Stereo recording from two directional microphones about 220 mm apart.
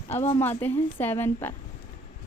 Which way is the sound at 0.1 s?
30° left (ahead or behind).